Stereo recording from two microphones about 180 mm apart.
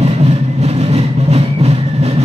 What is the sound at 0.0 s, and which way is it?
Vehicle, 35° right (ahead or behind).